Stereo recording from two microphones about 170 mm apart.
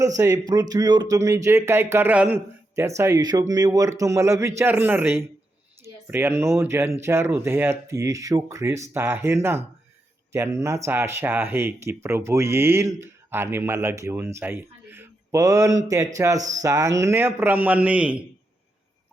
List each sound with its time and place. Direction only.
0.2 s speech: 20° right (ahead or behind)